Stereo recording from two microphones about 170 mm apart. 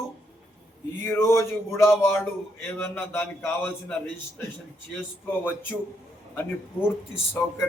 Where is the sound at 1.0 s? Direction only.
15° left (ahead or behind).